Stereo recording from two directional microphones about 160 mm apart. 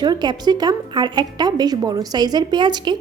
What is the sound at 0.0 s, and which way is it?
A woman's voice, 25° right (ahead or behind).